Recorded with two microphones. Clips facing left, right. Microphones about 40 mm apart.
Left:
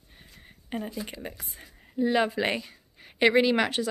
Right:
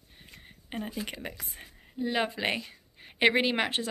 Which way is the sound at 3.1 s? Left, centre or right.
Right.